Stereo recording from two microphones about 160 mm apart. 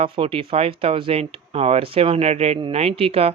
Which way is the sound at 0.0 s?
35° right (ahead or behind).